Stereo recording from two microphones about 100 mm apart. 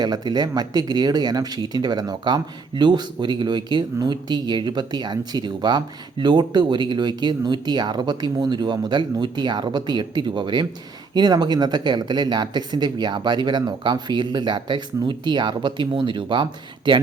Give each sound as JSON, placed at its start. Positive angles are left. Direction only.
{"t": 0.0, "sound": "speech", "side_deg": -45}